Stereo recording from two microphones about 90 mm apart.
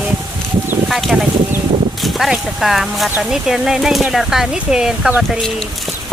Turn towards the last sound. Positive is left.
turn(degrees=5)  # may be behind; listen again after turning